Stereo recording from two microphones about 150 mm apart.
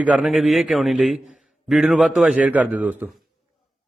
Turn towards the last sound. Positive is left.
turn(degrees=-10)  # may be behind; listen again after turning